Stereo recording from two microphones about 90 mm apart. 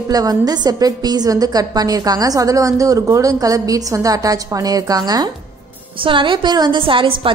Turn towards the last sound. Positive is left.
turn(degrees=-75)  # may be behind; listen again after turning